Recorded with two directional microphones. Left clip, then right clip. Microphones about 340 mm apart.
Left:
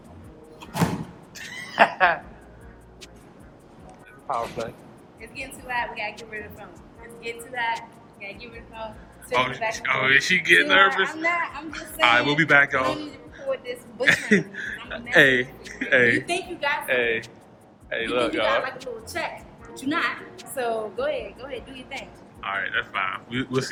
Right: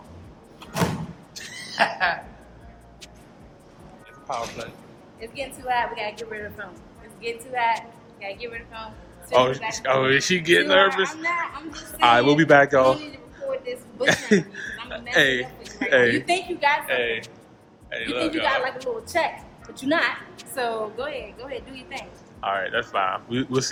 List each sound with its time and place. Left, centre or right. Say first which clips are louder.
0.6 s door: right 1 dB; centre
1.4 s a sound: left 4 dB; centre
4.3 s a woman's voice: left 2 dB; centre
5.2 s a woman's voice: right 5 dB; right
7.2 s a woman's voice: right 4 dB; right
9.3 s a woman's voice: right 4 dB; centre
16.2 s a woman's voice: right 5 dB; right
16.8 s a woman's voice: left 1 dB; centre
19.1 s a woman's voice: right 6 dB; right
20.4 s a woman's voice: even; centre